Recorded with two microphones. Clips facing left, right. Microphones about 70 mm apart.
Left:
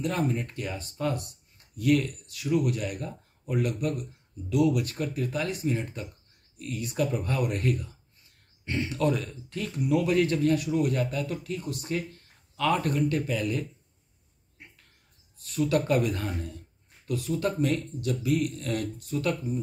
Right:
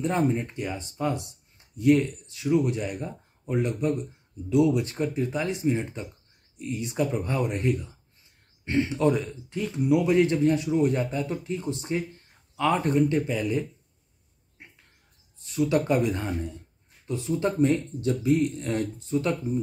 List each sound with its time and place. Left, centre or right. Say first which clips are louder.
0.0 s speech: right 4 dB; right
14.6 s a sound: right 1 dB; right
15.3 s speech: right 2 dB; centre